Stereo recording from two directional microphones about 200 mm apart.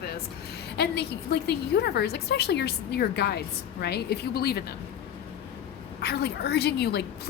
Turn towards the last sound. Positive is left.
turn(degrees=55)  # may be behind; listen again after turning